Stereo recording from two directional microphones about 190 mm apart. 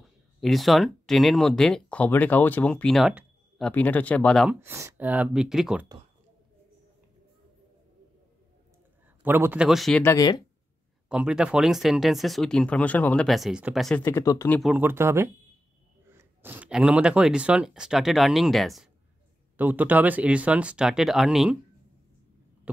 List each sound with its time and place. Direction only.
0.4 s speech: centre (ahead or behind)
4.5 s speech: 10° right (ahead or behind)
9.2 s speech: 10° right (ahead or behind)
10.0 s speech: 20° left (ahead or behind)
11.1 s speech: 5° right (ahead or behind)
14.0 s speech: 15° left (ahead or behind)
14.6 s speech: 5° right (ahead or behind)